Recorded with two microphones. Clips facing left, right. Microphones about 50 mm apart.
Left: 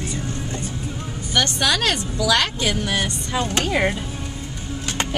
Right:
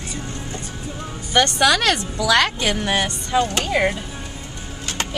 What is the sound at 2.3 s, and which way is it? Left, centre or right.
Speech, right.